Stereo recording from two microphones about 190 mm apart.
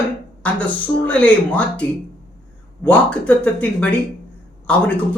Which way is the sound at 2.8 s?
5° left (ahead or behind).